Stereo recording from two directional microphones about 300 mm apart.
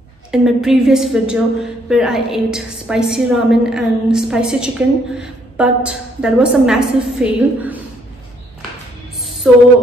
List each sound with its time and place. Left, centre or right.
0.3 s a woman's voice: centre
9.5 s a woman's voice: centre